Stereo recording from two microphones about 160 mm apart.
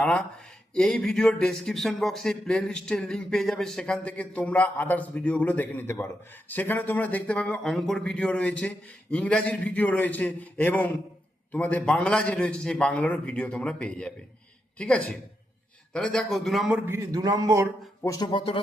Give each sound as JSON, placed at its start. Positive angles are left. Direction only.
{"t": 0.0, "sound": "a man's voice", "side_deg": 10}
{"t": 18.0, "sound": "speech", "side_deg": 20}